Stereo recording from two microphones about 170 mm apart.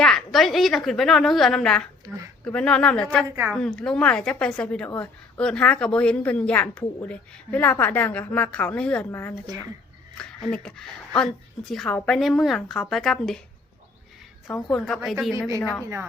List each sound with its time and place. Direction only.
0.0 s a woman's voice: centre (ahead or behind)
14.4 s a woman's voice: 5° left (ahead or behind)